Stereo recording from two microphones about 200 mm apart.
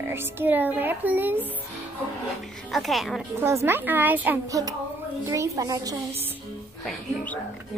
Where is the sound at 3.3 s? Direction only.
10° right (ahead or behind).